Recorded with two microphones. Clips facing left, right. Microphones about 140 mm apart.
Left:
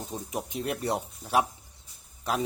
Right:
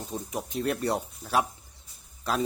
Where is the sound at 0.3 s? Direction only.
15° left (ahead or behind).